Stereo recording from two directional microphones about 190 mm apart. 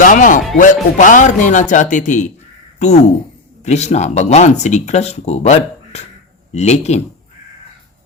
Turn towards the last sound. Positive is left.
turn(degrees=35)  # may be behind; listen again after turning